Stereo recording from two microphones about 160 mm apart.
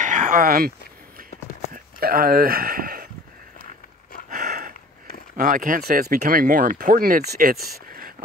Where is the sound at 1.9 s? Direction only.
65° right (ahead or behind).